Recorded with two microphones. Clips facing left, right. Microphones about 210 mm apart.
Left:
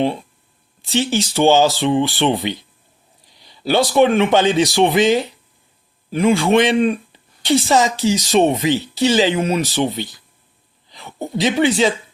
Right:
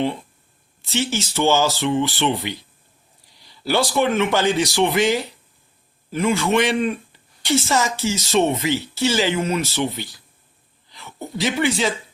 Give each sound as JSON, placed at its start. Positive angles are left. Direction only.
{"t": 0.8, "sound": "speech", "side_deg": 15}